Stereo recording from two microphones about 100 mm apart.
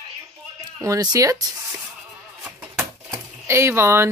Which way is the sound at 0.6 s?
35° right (ahead or behind).